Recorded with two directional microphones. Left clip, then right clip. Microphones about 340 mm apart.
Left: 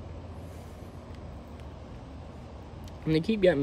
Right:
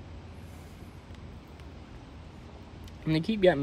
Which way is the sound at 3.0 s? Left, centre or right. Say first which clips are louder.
Even; centre.